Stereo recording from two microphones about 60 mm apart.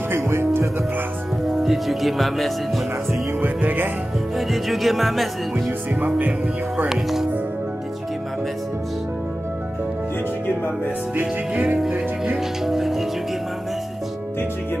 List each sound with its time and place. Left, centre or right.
0.1 s music: right
1.5 s speech: centre
3.3 s music: right
4.4 s speech: centre
5.7 s speech: right
6.9 s speech: centre
11.5 s speech: right
12.4 s speech: centre